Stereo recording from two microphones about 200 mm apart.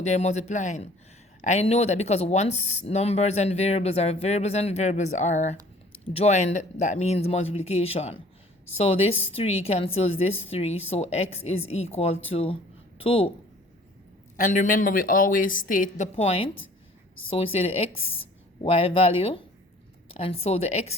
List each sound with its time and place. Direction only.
0.0 s speech: 35° left (ahead or behind)
14.3 s a woman's voice: 40° left (ahead or behind)